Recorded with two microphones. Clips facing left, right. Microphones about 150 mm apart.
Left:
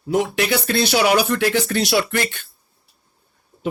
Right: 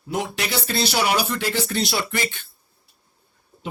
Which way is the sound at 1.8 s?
80° left.